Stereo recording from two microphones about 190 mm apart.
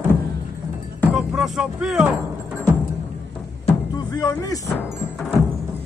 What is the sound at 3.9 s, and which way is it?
Speech, 20° left (ahead or behind).